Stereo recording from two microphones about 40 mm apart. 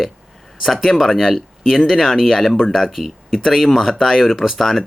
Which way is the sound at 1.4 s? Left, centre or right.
Centre.